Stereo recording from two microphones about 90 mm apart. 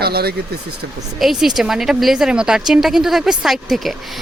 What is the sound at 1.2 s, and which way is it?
Speech, 5° right (ahead or behind).